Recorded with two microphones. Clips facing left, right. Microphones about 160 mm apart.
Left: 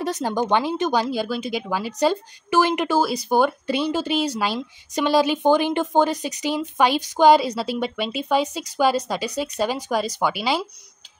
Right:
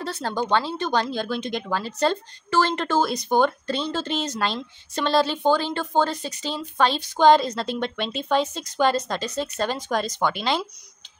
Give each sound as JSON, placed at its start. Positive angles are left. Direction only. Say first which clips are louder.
{"t": 0.0, "sound": "speech", "louder": "left 4 dB", "side_deg": 15}
{"t": 1.0, "sound": "speech", "louder": "left 2 dB", "side_deg": 5}